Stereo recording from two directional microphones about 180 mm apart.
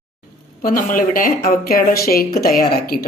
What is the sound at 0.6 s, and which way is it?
A woman's voice, 50° left (ahead or behind).